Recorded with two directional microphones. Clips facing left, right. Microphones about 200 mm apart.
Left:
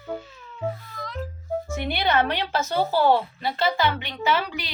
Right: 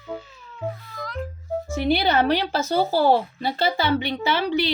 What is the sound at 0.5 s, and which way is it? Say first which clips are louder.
Cat: left 1 dB; centre (ahead or behind).